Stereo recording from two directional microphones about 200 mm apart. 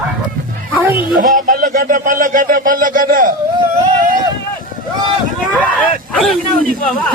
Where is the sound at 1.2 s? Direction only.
40° right (ahead or behind).